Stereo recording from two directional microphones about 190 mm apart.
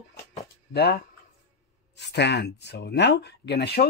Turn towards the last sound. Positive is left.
turn(degrees=60)  # may be behind; listen again after turning